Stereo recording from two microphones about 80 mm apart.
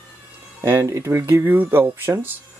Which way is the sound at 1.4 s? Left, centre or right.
Right.